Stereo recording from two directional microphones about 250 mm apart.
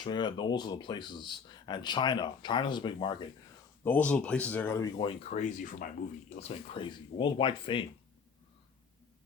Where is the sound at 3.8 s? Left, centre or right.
Centre.